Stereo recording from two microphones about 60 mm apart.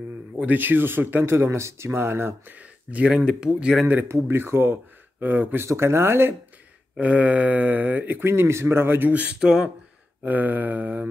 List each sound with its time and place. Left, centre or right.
0.4 s speech: right
2.5 s speech: right
4.1 s speech: right
5.2 s speech: right
5.6 s speech: right
7.0 s speech: right
8.8 s speech: right
9.1 s speech: right
10.2 s speech: right